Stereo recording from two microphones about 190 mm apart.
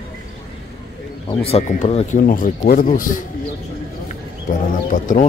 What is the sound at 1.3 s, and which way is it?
Speech, 30° left (ahead or behind).